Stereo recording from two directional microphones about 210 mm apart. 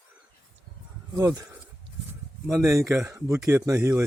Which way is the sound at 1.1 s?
15° right (ahead or behind).